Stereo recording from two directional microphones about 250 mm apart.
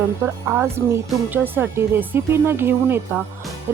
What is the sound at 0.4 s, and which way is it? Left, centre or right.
Speech, centre.